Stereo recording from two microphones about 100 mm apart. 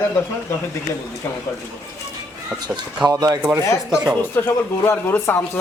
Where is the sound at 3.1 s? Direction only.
40° right (ahead or behind).